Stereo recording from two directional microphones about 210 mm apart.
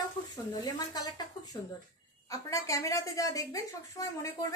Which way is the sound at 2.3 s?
15° left (ahead or behind).